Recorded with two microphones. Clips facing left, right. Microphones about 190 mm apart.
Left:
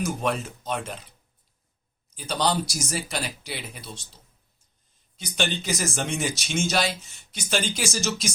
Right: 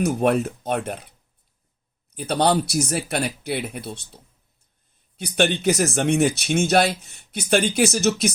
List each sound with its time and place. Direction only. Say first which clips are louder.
0.0 s speech: right 7 dB; 60° right (ahead or behind)
2.1 s speech: right 5 dB; 60° right (ahead or behind)